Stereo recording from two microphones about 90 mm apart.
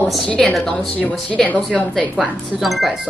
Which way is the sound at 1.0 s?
15° left (ahead or behind).